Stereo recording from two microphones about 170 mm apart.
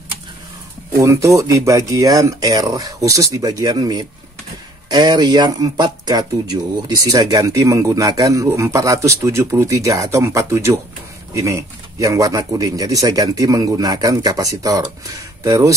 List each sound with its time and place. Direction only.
0.9 s speech: 20° right (ahead or behind)